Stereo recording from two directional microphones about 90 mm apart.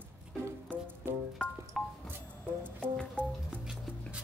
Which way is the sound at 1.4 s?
10° left (ahead or behind).